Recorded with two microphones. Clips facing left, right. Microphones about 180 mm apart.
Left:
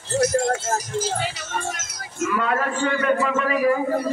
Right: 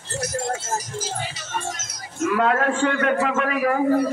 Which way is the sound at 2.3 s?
75° right (ahead or behind).